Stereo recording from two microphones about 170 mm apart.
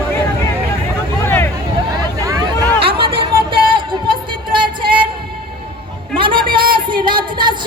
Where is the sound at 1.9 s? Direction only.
20° right (ahead or behind).